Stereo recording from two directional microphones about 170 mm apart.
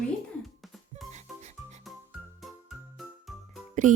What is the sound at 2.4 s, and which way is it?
Music, centre (ahead or behind).